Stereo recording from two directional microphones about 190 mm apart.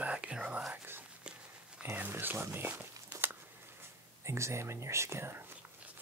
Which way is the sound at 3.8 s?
15° right (ahead or behind).